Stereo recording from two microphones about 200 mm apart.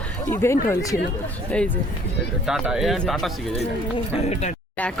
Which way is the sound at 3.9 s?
30° left (ahead or behind).